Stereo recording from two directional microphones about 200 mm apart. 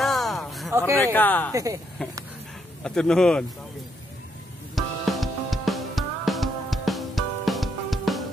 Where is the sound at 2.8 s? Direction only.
5° left (ahead or behind).